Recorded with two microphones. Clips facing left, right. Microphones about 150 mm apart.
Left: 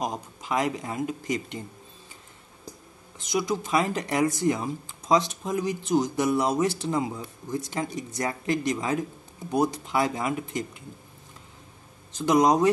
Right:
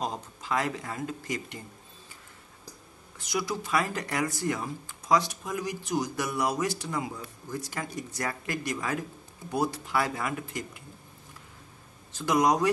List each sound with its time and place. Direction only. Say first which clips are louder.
0.0 s speech: left 2 dB; 15° left (ahead or behind)
3.2 s speech: left 5 dB; 20° left (ahead or behind)
12.1 s speech: left 4 dB; 20° left (ahead or behind)